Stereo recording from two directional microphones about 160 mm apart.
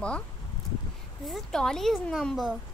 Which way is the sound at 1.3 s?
5° left (ahead or behind).